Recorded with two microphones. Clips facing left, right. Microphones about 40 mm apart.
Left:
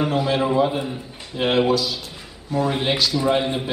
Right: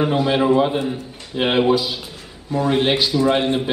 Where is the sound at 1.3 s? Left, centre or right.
Right.